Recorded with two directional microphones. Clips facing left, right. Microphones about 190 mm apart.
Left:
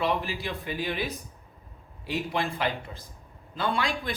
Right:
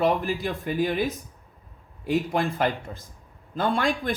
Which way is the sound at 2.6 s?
45° right (ahead or behind).